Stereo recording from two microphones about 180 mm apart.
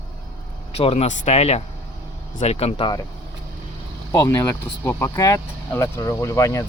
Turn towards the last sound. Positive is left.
turn(degrees=15)  # may be behind; listen again after turning